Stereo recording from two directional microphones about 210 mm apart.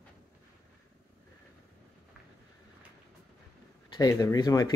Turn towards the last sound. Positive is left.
turn(degrees=20)  # may be behind; listen again after turning